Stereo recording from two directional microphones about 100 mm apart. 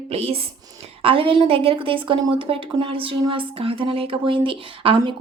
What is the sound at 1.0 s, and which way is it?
Speech, 65° right (ahead or behind).